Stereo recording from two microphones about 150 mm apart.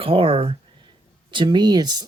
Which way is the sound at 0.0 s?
35° right (ahead or behind).